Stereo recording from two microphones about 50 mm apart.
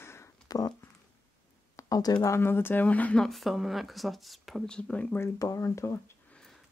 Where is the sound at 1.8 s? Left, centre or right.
Left.